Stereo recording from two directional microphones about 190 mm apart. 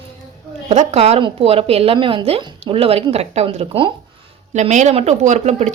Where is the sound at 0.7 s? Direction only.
35° right (ahead or behind).